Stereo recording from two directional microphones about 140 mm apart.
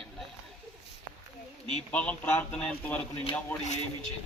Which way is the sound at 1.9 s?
10° left (ahead or behind).